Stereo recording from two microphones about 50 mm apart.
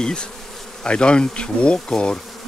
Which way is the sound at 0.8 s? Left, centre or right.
Centre.